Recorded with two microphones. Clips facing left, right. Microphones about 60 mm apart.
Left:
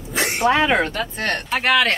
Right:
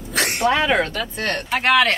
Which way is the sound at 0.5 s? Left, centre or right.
Left.